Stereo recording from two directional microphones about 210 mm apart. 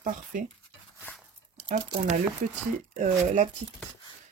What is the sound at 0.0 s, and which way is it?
Speech, 40° right (ahead or behind).